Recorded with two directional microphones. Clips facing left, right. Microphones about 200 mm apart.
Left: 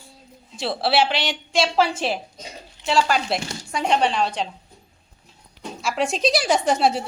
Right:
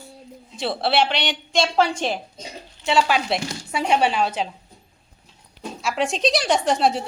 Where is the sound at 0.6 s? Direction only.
Centre (ahead or behind).